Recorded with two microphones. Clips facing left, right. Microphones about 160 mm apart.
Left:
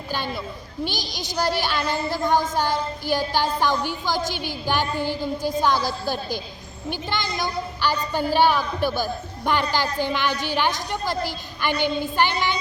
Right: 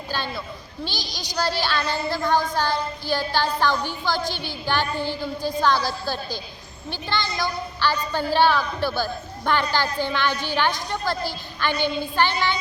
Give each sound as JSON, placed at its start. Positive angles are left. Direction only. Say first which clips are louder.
{"t": 0.1, "sound": "a woman's voice", "louder": "left 2 dB", "side_deg": 15}